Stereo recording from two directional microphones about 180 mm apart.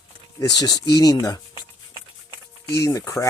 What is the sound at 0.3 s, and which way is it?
Speech, 20° left (ahead or behind).